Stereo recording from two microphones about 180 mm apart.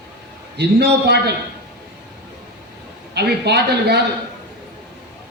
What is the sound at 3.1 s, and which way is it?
Speech, 65° right (ahead or behind).